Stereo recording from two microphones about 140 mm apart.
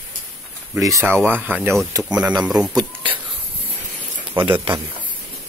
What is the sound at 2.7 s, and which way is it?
Speech, 30° right (ahead or behind).